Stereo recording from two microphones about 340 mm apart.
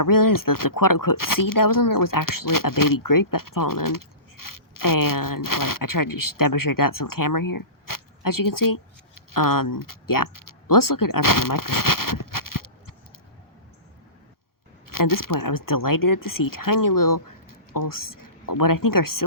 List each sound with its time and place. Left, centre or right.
0.0 s speech: left
14.8 s speech: left